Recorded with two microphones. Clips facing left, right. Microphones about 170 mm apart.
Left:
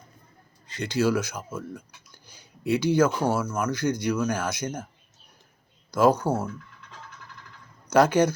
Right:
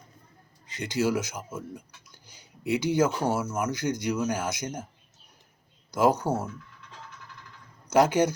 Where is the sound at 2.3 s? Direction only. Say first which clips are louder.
Left 3 dB; 20° right (ahead or behind).